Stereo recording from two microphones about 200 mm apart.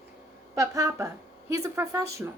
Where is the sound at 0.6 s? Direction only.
15° right (ahead or behind).